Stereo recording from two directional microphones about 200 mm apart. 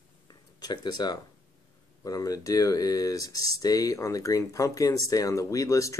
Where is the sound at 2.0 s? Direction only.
15° left (ahead or behind).